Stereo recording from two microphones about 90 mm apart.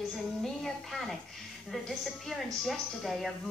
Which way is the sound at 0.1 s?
5° left (ahead or behind).